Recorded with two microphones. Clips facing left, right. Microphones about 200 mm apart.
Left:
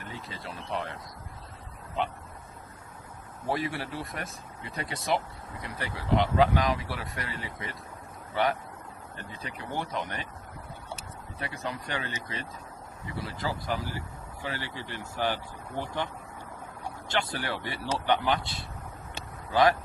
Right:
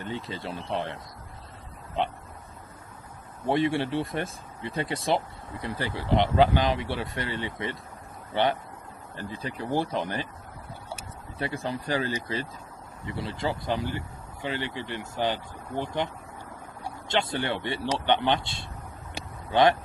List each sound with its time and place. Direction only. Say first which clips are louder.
0.0 s speech: right 7 dB; 30° right (ahead or behind)
2.0 s speech: right 2 dB; 30° right (ahead or behind)
3.4 s speech: right 7 dB; 25° right (ahead or behind)
11.3 s speech: right 5 dB; 30° right (ahead or behind)
17.1 s speech: right 4 dB; 25° right (ahead or behind)